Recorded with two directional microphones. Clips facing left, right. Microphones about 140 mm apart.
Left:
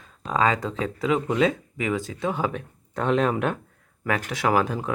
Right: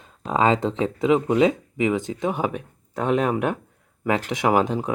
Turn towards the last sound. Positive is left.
turn(degrees=-20)  # may be behind; listen again after turning